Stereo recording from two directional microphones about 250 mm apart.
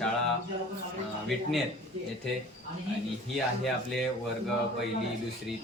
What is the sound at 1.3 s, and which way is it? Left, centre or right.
Speech, centre.